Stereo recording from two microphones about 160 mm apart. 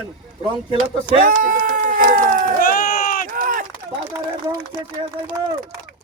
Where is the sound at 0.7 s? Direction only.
55° right (ahead or behind).